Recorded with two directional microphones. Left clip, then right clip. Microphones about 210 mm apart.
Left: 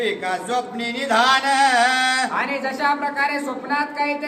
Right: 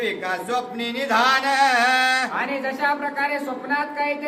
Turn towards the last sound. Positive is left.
turn(degrees=10)  # may be behind; listen again after turning